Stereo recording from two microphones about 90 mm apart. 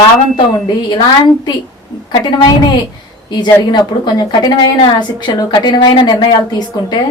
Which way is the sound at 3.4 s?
50° left (ahead or behind).